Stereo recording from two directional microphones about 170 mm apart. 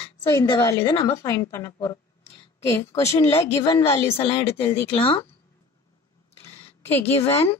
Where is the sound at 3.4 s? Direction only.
15° left (ahead or behind).